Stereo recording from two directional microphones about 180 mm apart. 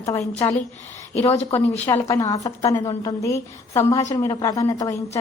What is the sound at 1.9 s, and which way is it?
A woman's voice, 20° left (ahead or behind).